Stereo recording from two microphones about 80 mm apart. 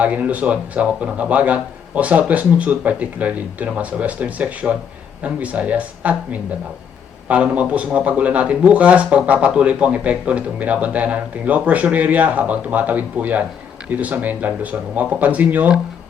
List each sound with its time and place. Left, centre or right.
0.0 s speech: centre